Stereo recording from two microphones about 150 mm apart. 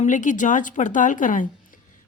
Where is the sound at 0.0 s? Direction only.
55° left (ahead or behind).